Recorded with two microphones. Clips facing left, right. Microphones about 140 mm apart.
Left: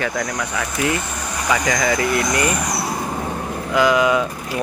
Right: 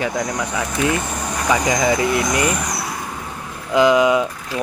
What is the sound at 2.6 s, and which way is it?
Vehicle, 30° left (ahead or behind).